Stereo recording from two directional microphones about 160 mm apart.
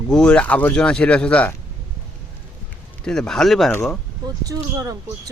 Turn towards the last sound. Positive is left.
turn(degrees=-20)  # may be behind; listen again after turning